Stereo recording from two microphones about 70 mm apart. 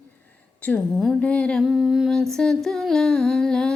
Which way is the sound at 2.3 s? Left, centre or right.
Centre.